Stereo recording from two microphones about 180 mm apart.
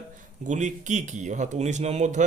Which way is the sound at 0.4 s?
45° right (ahead or behind).